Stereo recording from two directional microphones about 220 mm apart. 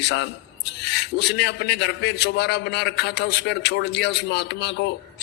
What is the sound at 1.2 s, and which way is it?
A man's voice, 50° left (ahead or behind).